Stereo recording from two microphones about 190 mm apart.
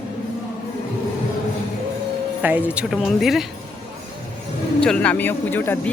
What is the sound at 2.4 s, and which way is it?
Speech, 10° right (ahead or behind).